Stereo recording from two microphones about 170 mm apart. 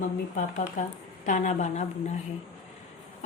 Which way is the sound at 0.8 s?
50° left (ahead or behind).